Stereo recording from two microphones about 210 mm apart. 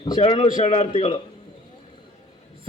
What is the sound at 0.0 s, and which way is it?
A man's voice, 25° left (ahead or behind).